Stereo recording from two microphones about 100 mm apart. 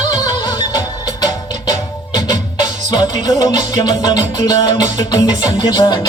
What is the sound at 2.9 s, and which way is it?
Music, 40° left (ahead or behind).